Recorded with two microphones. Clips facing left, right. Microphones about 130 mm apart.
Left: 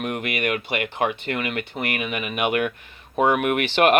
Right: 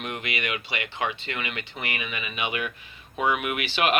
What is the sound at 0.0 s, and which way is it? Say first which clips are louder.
Speech: left 6 dB; 50° left (ahead or behind).